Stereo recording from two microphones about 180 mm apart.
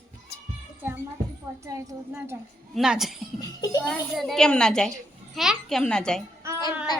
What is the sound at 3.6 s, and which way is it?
Speech, 20° left (ahead or behind).